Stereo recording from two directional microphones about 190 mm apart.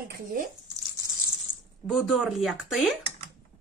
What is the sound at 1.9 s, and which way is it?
Speech, centre (ahead or behind).